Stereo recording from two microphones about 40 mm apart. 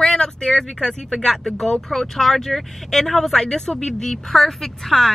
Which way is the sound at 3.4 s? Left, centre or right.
Centre.